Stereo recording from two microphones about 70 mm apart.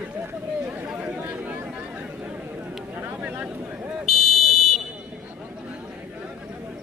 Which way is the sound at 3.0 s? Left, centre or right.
Right.